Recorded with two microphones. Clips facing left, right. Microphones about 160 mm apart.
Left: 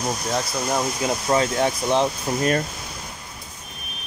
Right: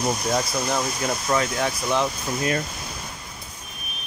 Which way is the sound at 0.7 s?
15° left (ahead or behind).